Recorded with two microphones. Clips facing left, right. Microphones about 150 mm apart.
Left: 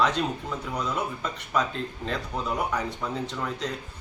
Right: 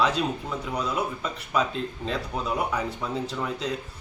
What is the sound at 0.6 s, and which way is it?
Speech, 10° right (ahead or behind).